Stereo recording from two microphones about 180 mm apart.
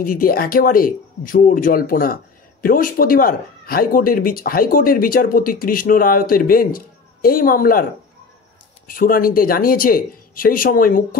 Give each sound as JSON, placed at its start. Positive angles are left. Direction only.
{"t": 0.0, "sound": "speech", "side_deg": 50}
{"t": 8.8, "sound": "speech", "side_deg": 50}